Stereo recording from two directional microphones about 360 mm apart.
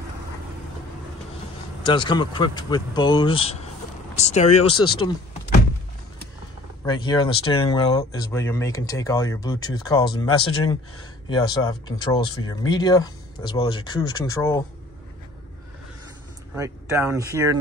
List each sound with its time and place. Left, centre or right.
1.8 s speech: centre
6.8 s speech: centre
11.2 s speech: centre
16.5 s speech: centre